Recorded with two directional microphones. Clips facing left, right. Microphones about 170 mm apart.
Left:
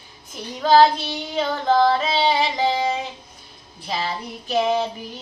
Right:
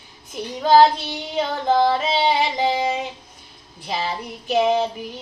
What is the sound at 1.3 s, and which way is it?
Child singing, 20° right (ahead or behind).